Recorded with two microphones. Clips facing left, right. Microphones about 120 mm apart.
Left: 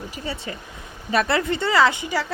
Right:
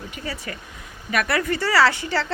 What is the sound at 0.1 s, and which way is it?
Speech, 25° left (ahead or behind).